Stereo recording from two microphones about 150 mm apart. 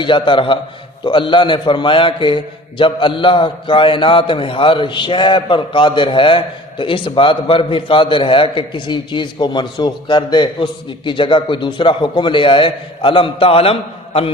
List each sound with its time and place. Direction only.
0.0 s a man's voice: 35° left (ahead or behind)